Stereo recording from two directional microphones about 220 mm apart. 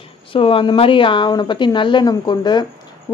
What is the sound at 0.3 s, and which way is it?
Speech, 25° left (ahead or behind).